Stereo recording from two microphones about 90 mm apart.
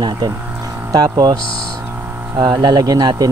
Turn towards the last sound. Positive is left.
turn(degrees=-45)  # may be behind; listen again after turning